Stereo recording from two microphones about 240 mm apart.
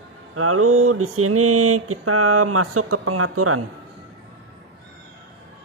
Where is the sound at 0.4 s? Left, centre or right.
Right.